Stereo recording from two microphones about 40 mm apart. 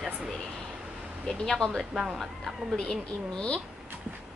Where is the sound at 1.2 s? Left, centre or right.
Centre.